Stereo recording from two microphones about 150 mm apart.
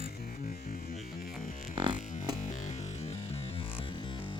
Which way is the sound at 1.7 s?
35° right (ahead or behind).